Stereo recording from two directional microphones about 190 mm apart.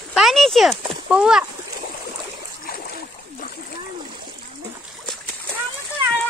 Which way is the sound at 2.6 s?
50° left (ahead or behind).